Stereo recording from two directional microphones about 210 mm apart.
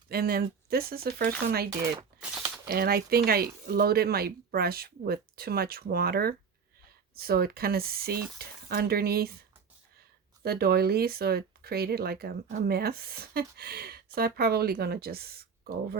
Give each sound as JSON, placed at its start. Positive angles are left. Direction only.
{"t": 0.1, "sound": "speech", "side_deg": -45}
{"t": 10.4, "sound": "speech", "side_deg": -50}